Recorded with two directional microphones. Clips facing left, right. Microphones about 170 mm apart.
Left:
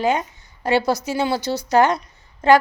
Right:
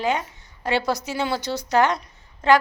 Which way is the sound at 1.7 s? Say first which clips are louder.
Left 3 dB; 40° left (ahead or behind).